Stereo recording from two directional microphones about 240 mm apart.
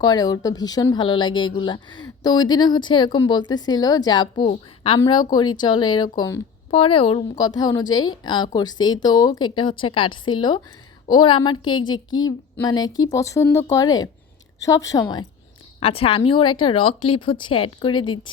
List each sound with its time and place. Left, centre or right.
0.0 s a woman's voice: centre